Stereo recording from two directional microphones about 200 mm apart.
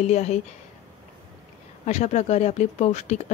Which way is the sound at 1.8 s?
35° left (ahead or behind).